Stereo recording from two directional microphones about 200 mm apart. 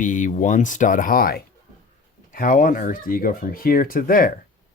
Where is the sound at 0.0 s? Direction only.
40° left (ahead or behind).